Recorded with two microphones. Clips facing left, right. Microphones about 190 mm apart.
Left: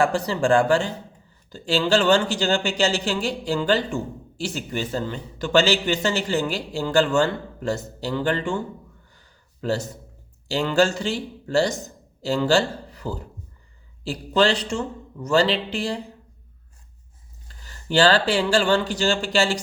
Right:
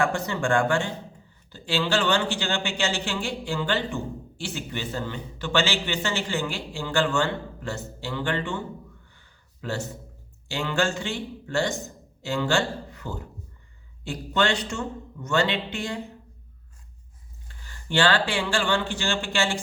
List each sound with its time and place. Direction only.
0.0 s a man's voice: 35° left (ahead or behind)
9.1 s a sound: 40° left (ahead or behind)
10.5 s a man's voice: 35° left (ahead or behind)
17.5 s speech: 40° left (ahead or behind)